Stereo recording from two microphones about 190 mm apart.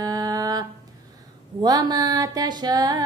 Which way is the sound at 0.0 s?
20° right (ahead or behind).